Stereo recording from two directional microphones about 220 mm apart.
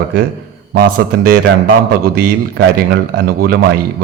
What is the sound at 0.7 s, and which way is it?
A man's voice, 40° right (ahead or behind).